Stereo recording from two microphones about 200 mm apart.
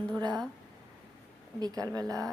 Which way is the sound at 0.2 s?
20° right (ahead or behind).